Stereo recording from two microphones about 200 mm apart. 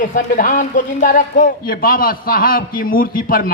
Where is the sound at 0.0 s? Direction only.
40° left (ahead or behind).